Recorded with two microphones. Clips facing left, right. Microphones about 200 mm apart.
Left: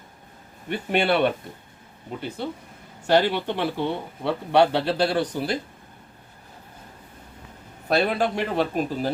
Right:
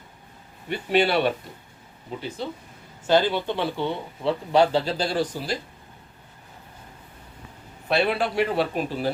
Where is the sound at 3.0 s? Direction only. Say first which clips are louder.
Even; 65° left (ahead or behind).